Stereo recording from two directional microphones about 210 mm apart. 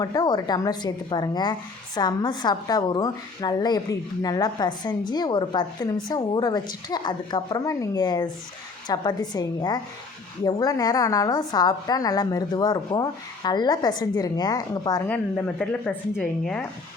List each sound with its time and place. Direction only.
0.0 s a woman's voice: 20° left (ahead or behind)
15.1 s a woman's voice: 5° left (ahead or behind)